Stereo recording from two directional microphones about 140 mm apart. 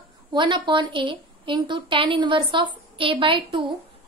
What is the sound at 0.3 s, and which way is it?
A woman's voice, 35° right (ahead or behind).